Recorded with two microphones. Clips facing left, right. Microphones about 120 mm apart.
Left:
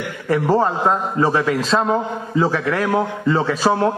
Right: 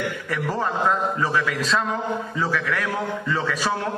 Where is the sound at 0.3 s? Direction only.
35° left (ahead or behind).